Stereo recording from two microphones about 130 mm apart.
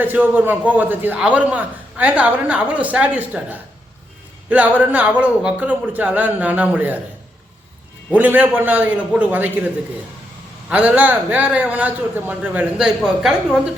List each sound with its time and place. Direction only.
0.0 s a man's voice: 15° right (ahead or behind)
8.1 s a man's voice: 15° right (ahead or behind)
10.7 s a man's voice: 10° right (ahead or behind)